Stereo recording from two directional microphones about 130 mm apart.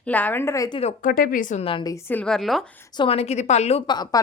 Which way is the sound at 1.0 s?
90° left.